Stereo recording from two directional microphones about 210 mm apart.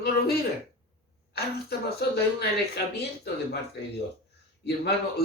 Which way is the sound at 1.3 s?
50° left (ahead or behind).